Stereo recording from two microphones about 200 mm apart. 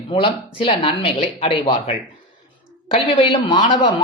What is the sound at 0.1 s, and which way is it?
Speech, 25° left (ahead or behind).